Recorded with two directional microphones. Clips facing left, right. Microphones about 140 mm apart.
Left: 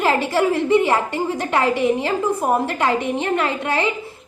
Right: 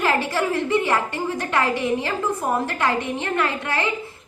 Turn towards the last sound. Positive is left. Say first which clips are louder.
# left 3 dB
turn(degrees=20)  # may be behind; listen again after turning